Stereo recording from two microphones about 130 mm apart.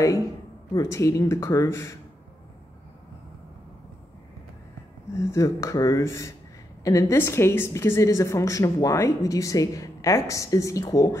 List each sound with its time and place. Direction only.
0.7 s a woman's voice: 25° left (ahead or behind)
5.1 s a woman's voice: 25° left (ahead or behind)